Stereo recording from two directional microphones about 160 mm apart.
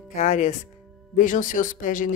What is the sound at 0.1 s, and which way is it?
A woman's voice, 45° left (ahead or behind).